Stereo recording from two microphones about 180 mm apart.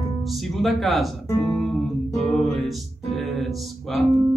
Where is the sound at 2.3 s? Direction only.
Centre (ahead or behind).